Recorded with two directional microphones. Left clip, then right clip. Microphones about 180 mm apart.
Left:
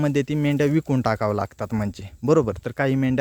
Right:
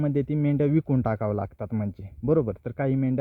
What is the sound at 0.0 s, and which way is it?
A man's voice, 15° left (ahead or behind).